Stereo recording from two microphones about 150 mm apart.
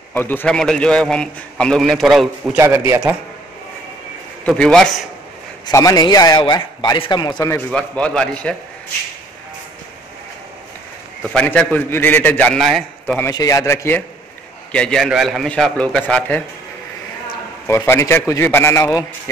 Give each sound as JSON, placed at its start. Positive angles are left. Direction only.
{"t": 0.1, "sound": "a man's voice", "side_deg": 15}
{"t": 2.5, "sound": "a man's voice", "side_deg": -15}
{"t": 4.5, "sound": "a man's voice", "side_deg": 5}
{"t": 5.7, "sound": "a man's voice", "side_deg": 25}
{"t": 7.7, "sound": "a man's voice", "side_deg": 5}
{"t": 11.3, "sound": "a man's voice", "side_deg": 10}
{"t": 13.3, "sound": "a man's voice", "side_deg": 20}
{"t": 14.7, "sound": "a man's voice", "side_deg": 5}
{"t": 17.6, "sound": "a man's voice", "side_deg": 15}